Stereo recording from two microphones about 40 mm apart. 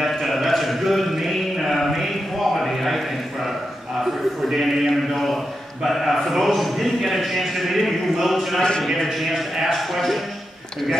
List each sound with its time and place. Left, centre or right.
0.0 s a sound: centre
4.0 s a man's voice: centre
8.5 s speech: centre
8.8 s a man's voice: centre